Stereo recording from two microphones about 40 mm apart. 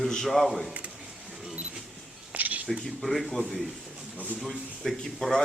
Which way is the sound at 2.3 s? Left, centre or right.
Right.